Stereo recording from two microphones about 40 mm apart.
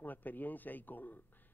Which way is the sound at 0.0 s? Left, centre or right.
Left.